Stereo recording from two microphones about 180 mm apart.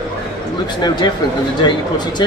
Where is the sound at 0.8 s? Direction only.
25° left (ahead or behind).